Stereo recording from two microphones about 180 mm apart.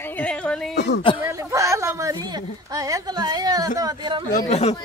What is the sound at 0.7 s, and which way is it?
Speech, 75° left (ahead or behind).